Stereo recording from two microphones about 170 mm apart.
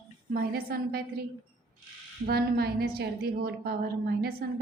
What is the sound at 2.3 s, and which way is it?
A woman's voice, 65° right (ahead or behind).